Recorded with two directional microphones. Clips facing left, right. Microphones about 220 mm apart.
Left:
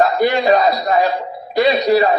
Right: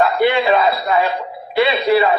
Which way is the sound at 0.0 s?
40° left (ahead or behind).